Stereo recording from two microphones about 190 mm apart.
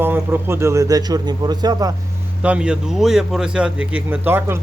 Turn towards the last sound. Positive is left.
turn(degrees=-10)  # may be behind; listen again after turning